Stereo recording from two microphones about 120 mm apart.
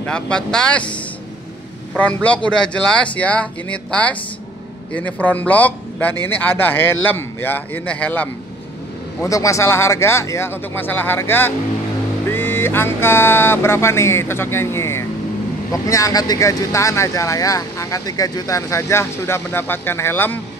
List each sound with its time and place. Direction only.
0.0 s speech: 10° left (ahead or behind)
2.0 s speech: 10° left (ahead or behind)
9.2 s speech: 25° left (ahead or behind)